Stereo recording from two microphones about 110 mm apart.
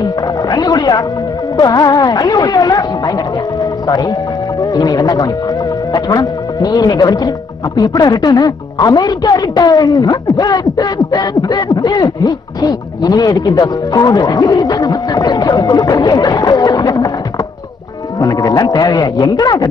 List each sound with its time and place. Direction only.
0.0 s dog: 35° left (ahead or behind)
1.6 s speech: 35° left (ahead or behind)
3.8 s speech: 35° left (ahead or behind)
18.2 s speech: 35° left (ahead or behind)